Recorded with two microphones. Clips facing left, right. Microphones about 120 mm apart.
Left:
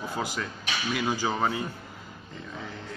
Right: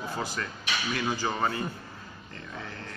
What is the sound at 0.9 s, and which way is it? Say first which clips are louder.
Speech: left 3 dB; 10° left (ahead or behind).